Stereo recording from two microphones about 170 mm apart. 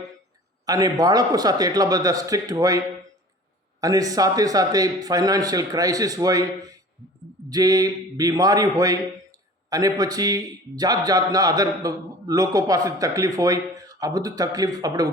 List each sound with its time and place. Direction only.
0.6 s a man's voice: 20° right (ahead or behind)